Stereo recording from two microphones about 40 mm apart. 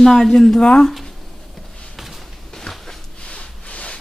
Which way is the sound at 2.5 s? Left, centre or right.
Centre.